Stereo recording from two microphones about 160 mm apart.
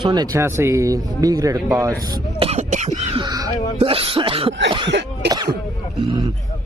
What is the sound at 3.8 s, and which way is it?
Throat clearing, 35° right (ahead or behind).